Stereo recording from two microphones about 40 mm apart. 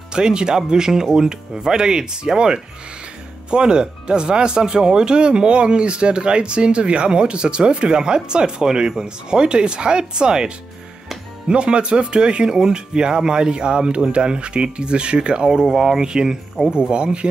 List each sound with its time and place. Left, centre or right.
0.1 s speech: right